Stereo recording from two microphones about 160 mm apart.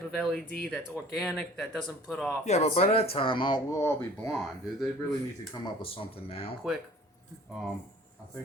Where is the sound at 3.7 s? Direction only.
15° left (ahead or behind).